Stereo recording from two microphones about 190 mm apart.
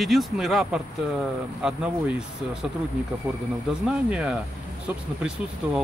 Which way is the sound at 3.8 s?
5° right (ahead or behind).